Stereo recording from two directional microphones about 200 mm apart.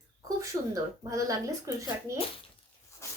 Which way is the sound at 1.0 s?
15° right (ahead or behind).